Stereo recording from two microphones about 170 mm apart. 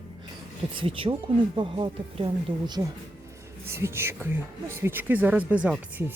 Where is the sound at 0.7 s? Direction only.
30° right (ahead or behind).